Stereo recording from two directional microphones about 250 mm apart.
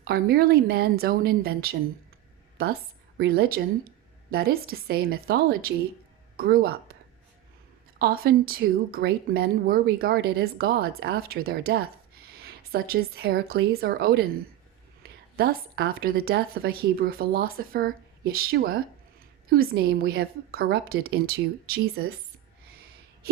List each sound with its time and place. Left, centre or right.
0.0 s speech: right
3.2 s a woman's voice: right
7.9 s speech: right
15.4 s speech: right